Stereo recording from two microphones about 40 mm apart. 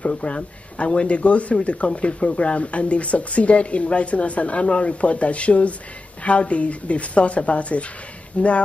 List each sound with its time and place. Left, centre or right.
0.0 s speech: left